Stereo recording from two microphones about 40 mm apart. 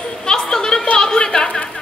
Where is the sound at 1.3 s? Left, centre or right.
Left.